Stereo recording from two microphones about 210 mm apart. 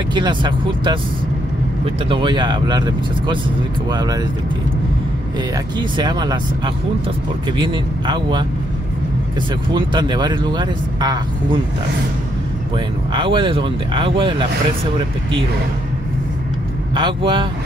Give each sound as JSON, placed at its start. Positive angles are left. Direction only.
{"t": 0.1, "sound": "speech", "side_deg": -20}
{"t": 2.0, "sound": "speech", "side_deg": -20}
{"t": 3.9, "sound": "speech", "side_deg": -20}
{"t": 5.8, "sound": "speech", "side_deg": -20}
{"t": 9.8, "sound": "speech", "side_deg": -20}
{"t": 12.7, "sound": "speech", "side_deg": -20}
{"t": 16.9, "sound": "speech", "side_deg": -25}